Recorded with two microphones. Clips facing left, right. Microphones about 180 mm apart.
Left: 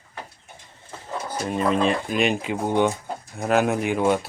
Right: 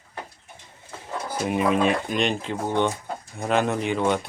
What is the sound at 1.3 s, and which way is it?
Speech, 10° right (ahead or behind).